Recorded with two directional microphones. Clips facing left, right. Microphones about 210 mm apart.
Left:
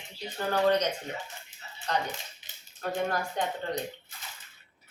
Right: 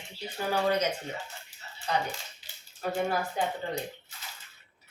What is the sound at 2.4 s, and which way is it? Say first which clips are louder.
Cap gun: right 1 dB; 20° left (ahead or behind).